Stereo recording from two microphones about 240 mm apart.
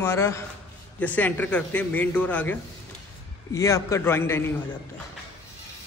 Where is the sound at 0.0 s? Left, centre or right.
Centre.